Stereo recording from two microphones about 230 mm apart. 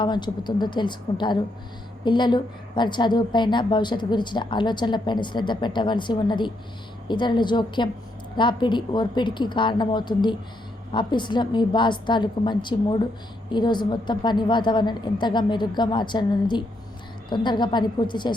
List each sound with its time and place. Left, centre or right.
0.0 s a woman's voice: centre